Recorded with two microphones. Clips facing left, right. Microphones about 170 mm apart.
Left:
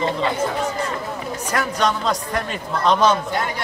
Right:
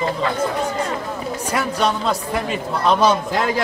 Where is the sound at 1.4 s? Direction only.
10° right (ahead or behind).